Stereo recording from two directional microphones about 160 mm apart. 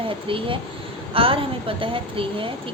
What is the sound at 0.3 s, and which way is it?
A woman's voice, 35° right (ahead or behind).